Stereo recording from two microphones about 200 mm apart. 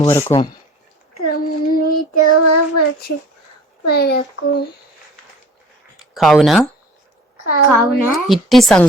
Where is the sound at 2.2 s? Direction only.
90° left.